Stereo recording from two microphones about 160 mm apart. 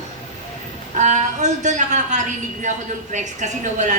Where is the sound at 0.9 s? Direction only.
50° right (ahead or behind).